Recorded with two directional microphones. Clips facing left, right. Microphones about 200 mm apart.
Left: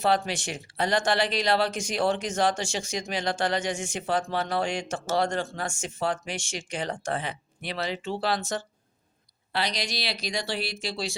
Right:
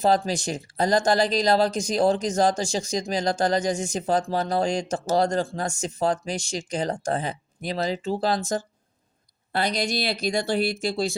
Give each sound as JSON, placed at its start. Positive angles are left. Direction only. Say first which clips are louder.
{"t": 0.0, "sound": "speech", "louder": "right 4 dB", "side_deg": -40}
{"t": 9.5, "sound": "speech", "louder": "right 5 dB", "side_deg": -50}